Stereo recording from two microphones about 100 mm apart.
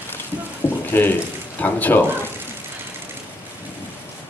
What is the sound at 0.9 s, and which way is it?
Speech, 20° left (ahead or behind).